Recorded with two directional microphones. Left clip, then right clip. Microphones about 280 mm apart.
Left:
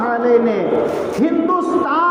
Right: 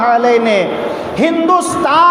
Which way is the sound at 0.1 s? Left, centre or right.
Right.